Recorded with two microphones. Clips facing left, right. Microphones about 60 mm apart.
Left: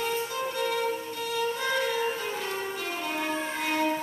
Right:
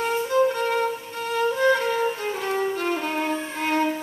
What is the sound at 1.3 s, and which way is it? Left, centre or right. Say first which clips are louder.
Music: right 8 dB; right.